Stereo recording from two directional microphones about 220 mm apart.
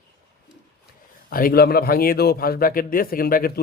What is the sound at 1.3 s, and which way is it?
A man's voice, 40° left (ahead or behind).